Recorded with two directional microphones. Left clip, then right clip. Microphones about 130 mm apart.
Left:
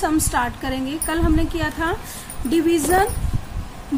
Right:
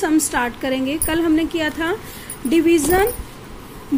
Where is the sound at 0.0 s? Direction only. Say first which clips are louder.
Right 2 dB; 15° right (ahead or behind).